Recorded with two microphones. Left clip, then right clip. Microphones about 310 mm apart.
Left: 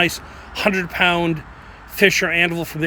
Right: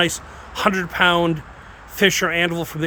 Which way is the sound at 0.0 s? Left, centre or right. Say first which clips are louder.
Left 1 dB; centre.